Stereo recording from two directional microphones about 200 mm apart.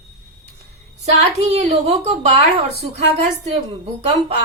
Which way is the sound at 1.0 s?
30° right (ahead or behind).